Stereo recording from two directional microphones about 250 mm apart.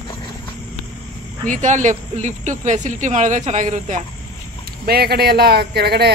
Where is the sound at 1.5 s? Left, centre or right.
Right.